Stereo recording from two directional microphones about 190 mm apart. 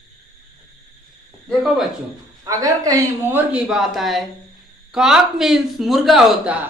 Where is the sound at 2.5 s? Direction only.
20° right (ahead or behind).